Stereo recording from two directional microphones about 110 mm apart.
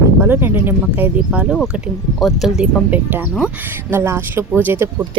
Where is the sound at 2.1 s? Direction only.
Centre (ahead or behind).